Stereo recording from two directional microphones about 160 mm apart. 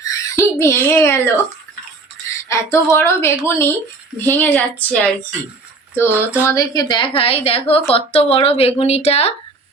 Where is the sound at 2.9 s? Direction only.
15° left (ahead or behind).